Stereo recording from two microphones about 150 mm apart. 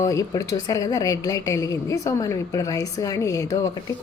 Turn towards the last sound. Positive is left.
turn(degrees=20)  # may be behind; listen again after turning